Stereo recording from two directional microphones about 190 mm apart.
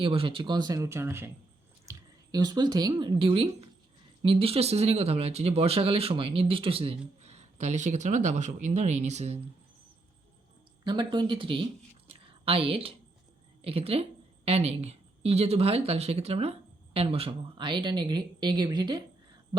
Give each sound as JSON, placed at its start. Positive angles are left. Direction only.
{"t": 0.0, "sound": "speech", "side_deg": -30}
{"t": 10.8, "sound": "speech", "side_deg": -25}
{"t": 12.0, "sound": "a sound", "side_deg": -30}
{"t": 13.6, "sound": "speech", "side_deg": -30}